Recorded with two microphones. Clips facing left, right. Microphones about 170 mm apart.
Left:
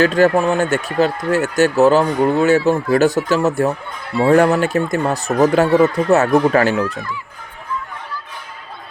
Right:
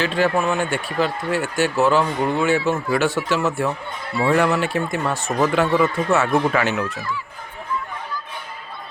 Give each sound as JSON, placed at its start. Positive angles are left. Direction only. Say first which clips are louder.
{"t": 0.0, "sound": "speech", "louder": "left 6 dB", "side_deg": 45}